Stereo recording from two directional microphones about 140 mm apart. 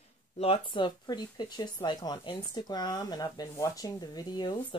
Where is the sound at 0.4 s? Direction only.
40° left (ahead or behind).